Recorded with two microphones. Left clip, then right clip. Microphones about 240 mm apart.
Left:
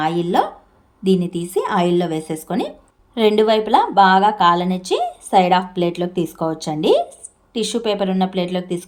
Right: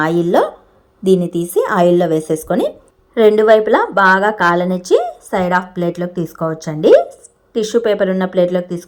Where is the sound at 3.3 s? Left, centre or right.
Right.